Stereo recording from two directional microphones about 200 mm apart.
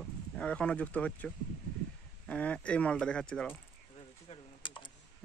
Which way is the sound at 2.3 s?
5° left (ahead or behind).